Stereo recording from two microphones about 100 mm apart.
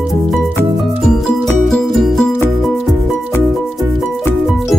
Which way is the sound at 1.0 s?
5° left (ahead or behind).